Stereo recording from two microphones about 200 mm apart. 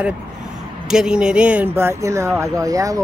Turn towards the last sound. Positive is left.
turn(degrees=-15)  # may be behind; listen again after turning